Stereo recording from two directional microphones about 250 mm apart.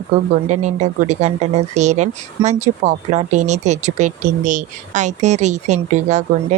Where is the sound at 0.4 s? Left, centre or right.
Right.